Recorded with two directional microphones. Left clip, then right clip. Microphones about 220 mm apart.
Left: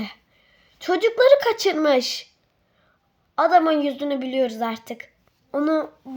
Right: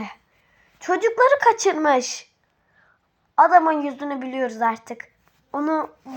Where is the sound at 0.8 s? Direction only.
30° left (ahead or behind).